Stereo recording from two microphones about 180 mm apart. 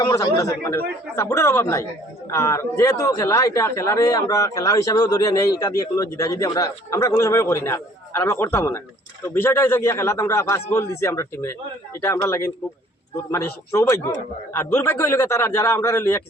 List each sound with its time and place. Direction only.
0.0 s a man's voice: 25° left (ahead or behind)